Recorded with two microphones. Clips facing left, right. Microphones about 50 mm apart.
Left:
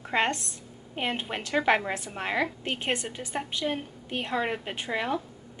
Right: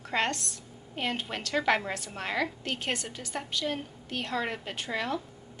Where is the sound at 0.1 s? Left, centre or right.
Left.